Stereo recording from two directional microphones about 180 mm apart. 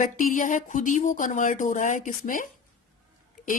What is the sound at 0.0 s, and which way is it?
Speech, 45° left (ahead or behind).